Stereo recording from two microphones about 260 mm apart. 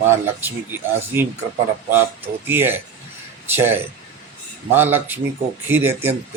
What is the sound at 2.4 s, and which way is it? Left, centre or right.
A man's voice, centre.